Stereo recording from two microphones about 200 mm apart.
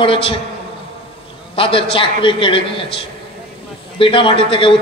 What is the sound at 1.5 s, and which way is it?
A man's voice, 25° left (ahead or behind).